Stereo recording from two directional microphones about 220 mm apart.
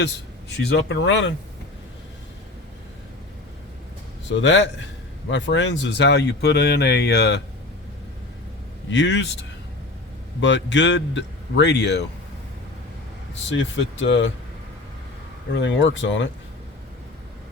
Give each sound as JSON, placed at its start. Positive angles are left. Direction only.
{"t": 0.5, "sound": "speech", "side_deg": 50}
{"t": 4.3, "sound": "speech", "side_deg": 55}
{"t": 8.9, "sound": "speech", "side_deg": 55}
{"t": 13.3, "sound": "speech", "side_deg": 55}
{"t": 15.5, "sound": "speech", "side_deg": 55}